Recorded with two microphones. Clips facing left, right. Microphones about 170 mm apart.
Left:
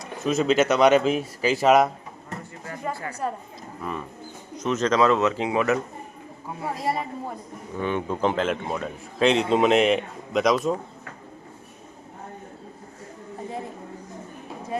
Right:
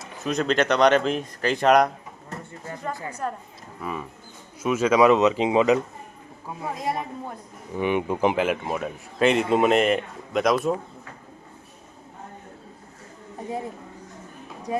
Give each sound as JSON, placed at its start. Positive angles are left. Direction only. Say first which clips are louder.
{"t": 0.0, "sound": "speech", "louder": "left 3 dB", "side_deg": 0}
{"t": 3.1, "sound": "a woman's voice", "louder": "left 1 dB", "side_deg": 10}
{"t": 3.8, "sound": "speech", "louder": "even", "side_deg": -5}
{"t": 6.7, "sound": "speech", "louder": "left 1 dB", "side_deg": 0}
{"t": 7.8, "sound": "speech", "louder": "right 2 dB", "side_deg": -15}